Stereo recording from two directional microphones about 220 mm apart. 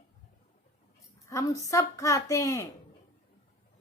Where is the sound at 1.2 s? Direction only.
15° left (ahead or behind).